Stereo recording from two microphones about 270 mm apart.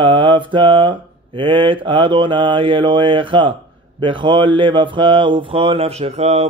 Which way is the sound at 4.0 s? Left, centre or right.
Centre.